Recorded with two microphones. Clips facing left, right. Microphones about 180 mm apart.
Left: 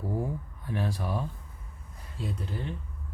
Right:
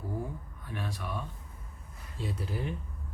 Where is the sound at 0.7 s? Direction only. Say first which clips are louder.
Left 6 dB; 35° left (ahead or behind).